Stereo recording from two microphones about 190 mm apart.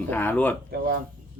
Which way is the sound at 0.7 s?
50° right (ahead or behind).